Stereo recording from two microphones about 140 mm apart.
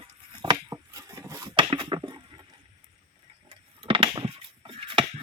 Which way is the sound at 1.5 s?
35° right (ahead or behind).